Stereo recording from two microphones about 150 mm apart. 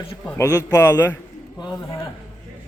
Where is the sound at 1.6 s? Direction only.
25° left (ahead or behind).